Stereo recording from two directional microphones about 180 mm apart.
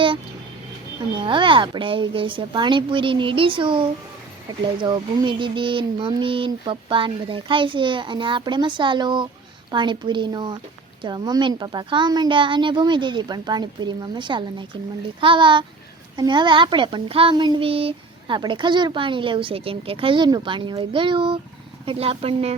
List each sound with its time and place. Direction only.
1.1 s a child's voice: 25° right (ahead or behind)